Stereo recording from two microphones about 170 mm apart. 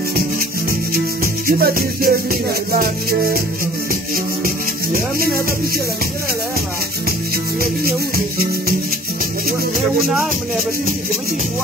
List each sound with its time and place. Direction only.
1.5 s music: 60° right (ahead or behind)